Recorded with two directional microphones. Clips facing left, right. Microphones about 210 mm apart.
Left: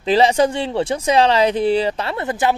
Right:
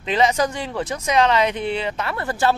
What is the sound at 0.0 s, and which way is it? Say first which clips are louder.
A man's voice: left 5 dB; 35° left (ahead or behind).